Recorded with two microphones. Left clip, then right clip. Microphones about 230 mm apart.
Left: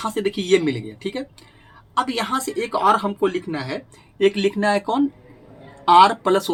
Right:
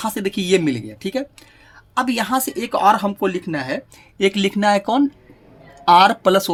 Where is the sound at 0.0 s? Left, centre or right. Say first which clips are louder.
Right 1 dB; right.